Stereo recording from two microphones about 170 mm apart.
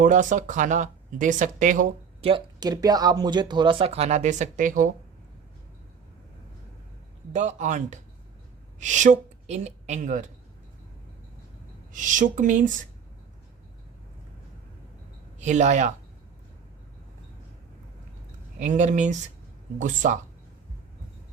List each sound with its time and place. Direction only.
0.0 s speech: 50° right (ahead or behind)
2.2 s speech: 30° right (ahead or behind); by 4.9 s 50° right (ahead or behind)
7.3 s speech: 45° right (ahead or behind)
11.9 s speech: 50° right (ahead or behind)
15.4 s speech: 45° right (ahead or behind)
18.6 s speech: 45° right (ahead or behind)